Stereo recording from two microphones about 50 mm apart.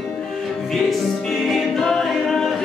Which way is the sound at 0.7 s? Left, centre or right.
Centre.